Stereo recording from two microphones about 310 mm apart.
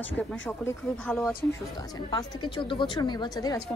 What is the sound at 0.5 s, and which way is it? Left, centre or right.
A woman's voice, centre.